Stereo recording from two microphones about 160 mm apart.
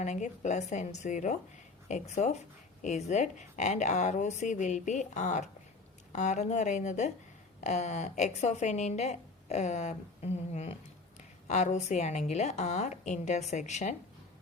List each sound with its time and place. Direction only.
0.0 s a woman's voice: 45° left (ahead or behind)